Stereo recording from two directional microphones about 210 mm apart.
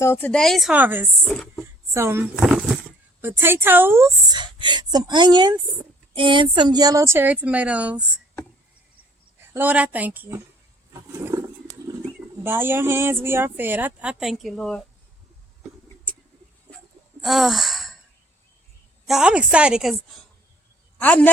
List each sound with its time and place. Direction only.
0.0 s speech: 10° left (ahead or behind); by 1.0 s 10° right (ahead or behind)
1.2 s speech: centre (ahead or behind)
1.9 s a woman's voice: 10° right (ahead or behind)
9.5 s speech: 10° right (ahead or behind)
11.3 s roaring cats: 10° right (ahead or behind)
12.4 s speech: 10° right (ahead or behind)
17.2 s sigh: centre (ahead or behind)
19.0 s speech: 5° right (ahead or behind)
21.0 s speech: 5° left (ahead or behind)